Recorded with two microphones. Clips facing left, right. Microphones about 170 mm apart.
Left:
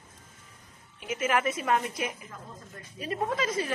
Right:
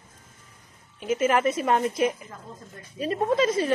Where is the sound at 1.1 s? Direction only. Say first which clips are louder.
Right 6 dB; 30° right (ahead or behind).